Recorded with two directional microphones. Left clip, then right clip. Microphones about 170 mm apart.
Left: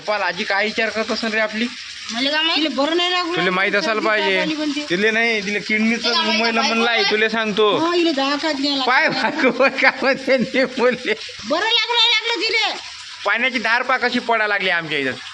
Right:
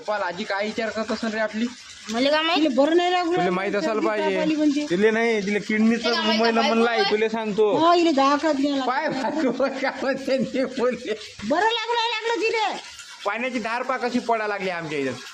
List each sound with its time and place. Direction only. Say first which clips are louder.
0.1 s a man's voice: left 6 dB; 10° left (ahead or behind)
2.1 s speech: left 2 dB; 65° right (ahead or behind)
3.3 s a man's voice: left 5 dB; 5° right (ahead or behind)
4.9 s a man's voice: left 6 dB; 15° right (ahead or behind); by 7.8 s centre (ahead or behind)
7.9 s speech: even; 75° right (ahead or behind)
8.4 s speech: left 2 dB; 45° right (ahead or behind)
8.9 s a man's voice: left 7 dB; 15° left (ahead or behind)
11.5 s speech: left 4 dB; 45° right (ahead or behind)
13.2 s a man's voice: left 8 dB; centre (ahead or behind)